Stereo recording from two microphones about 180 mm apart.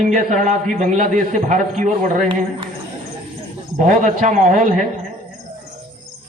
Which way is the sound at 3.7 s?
45° right (ahead or behind).